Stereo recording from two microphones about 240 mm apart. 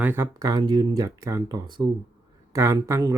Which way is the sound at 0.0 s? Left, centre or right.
Centre.